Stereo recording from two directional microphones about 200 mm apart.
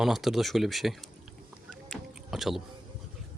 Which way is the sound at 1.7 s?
Centre (ahead or behind).